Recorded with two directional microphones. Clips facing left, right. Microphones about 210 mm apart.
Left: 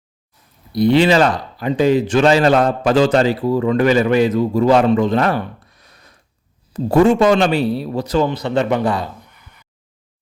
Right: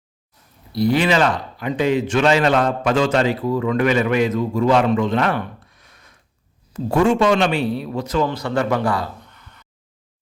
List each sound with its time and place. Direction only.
0.7 s a man's voice: 20° left (ahead or behind)
8.3 s a man's voice: 20° left (ahead or behind)
9.3 s a sound: 10° left (ahead or behind)